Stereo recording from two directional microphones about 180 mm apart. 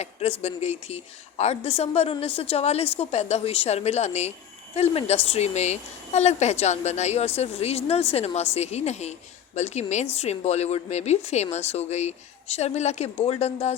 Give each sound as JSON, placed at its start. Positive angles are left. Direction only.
{"t": 0.0, "sound": "a woman's voice", "side_deg": 35}